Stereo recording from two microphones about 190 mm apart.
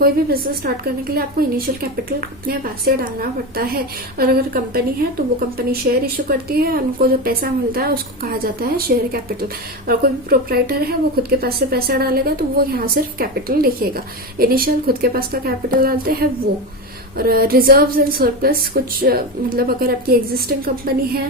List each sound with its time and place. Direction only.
0.0 s speech: 55° right (ahead or behind)
17.2 s speech: 50° right (ahead or behind)